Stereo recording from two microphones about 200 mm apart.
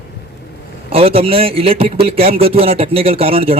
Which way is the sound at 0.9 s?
30° right (ahead or behind).